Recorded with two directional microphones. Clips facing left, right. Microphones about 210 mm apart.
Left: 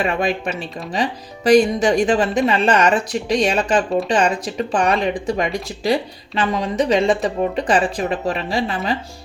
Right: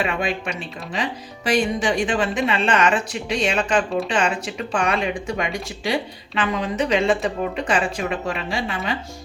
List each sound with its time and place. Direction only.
0.0 s speech: 40° left (ahead or behind)